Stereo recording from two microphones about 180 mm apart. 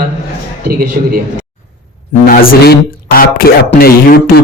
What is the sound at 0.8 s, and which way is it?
Speech, 50° right (ahead or behind).